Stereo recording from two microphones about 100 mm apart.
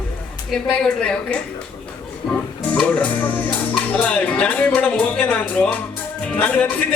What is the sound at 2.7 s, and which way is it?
Music, 15° left (ahead or behind).